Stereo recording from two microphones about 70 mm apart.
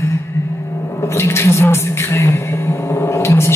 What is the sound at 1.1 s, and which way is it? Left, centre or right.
A woman's voice, left.